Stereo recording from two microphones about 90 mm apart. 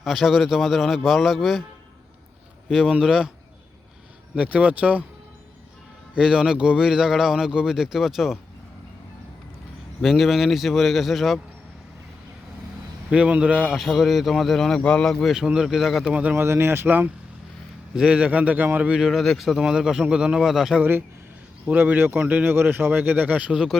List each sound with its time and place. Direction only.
0.0 s a man's voice: centre (ahead or behind)
2.6 s a man's voice: 5° right (ahead or behind)
4.4 s a man's voice: 15° right (ahead or behind)
6.1 s a man's voice: 5° right (ahead or behind)
10.0 s a man's voice: centre (ahead or behind)
13.1 s a man's voice: 10° right (ahead or behind); by 15.3 s 10° left (ahead or behind)
15.3 s a man's voice: 5° right (ahead or behind)
16.3 s speech: 30° right (ahead or behind)
17.9 s a man's voice: 10° right (ahead or behind)
21.7 s speech: 20° right (ahead or behind)